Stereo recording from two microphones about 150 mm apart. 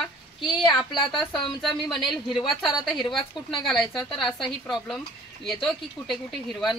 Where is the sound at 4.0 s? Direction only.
30° left (ahead or behind).